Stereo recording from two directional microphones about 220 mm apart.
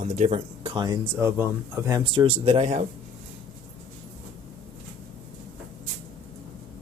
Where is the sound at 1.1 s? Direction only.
10° right (ahead or behind).